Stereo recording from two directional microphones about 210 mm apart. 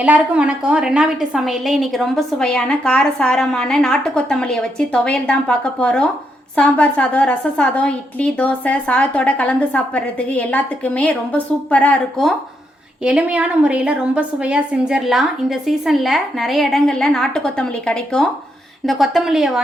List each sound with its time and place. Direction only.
0.0 s a woman's voice: 5° right (ahead or behind)